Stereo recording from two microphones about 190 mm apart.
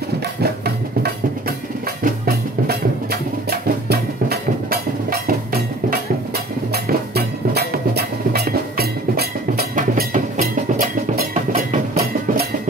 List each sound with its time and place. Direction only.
0.4 s music: 55° right (ahead or behind)